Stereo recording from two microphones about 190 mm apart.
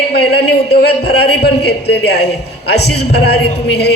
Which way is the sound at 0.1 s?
60° left (ahead or behind).